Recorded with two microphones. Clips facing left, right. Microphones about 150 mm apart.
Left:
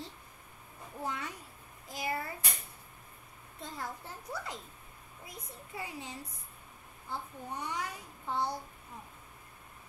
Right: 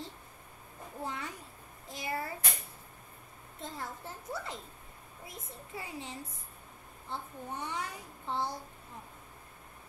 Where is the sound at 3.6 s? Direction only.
25° right (ahead or behind).